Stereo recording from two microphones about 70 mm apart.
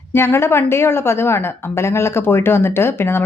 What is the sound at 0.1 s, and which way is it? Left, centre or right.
A woman's voice, left.